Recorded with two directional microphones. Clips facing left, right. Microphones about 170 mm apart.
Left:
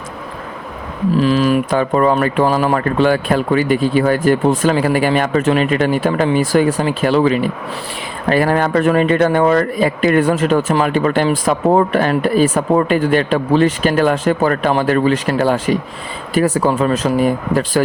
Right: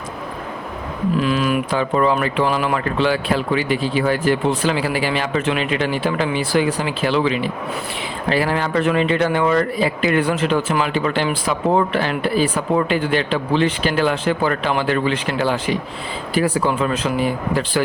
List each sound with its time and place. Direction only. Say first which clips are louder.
1.1 s speech: left 6 dB; 35° left (ahead or behind)